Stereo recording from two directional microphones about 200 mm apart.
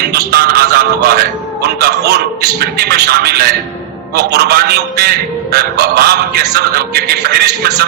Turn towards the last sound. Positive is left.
turn(degrees=-50)  # may be behind; listen again after turning